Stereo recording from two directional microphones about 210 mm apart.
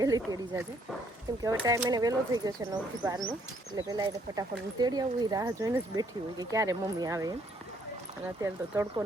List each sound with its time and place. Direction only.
0.0 s speech: 15° right (ahead or behind)
8.7 s speech: 15° right (ahead or behind)